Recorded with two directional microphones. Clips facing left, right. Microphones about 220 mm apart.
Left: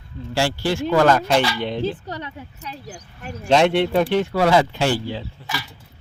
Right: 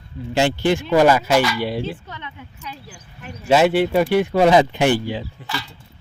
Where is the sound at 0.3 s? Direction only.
20° right (ahead or behind).